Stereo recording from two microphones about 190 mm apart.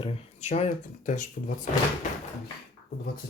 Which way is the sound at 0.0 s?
35° left (ahead or behind).